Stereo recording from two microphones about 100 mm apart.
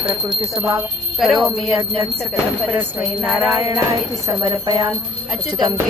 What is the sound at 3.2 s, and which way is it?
Music, 15° right (ahead or behind).